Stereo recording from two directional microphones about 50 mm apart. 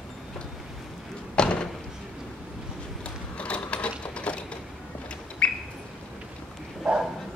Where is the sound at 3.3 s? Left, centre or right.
Left.